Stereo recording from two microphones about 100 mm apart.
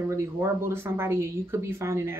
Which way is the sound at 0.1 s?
30° right (ahead or behind).